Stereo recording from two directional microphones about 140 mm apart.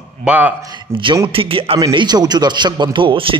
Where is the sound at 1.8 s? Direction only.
30° right (ahead or behind).